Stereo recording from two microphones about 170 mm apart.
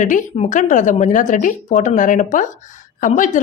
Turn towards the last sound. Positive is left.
turn(degrees=50)  # may be behind; listen again after turning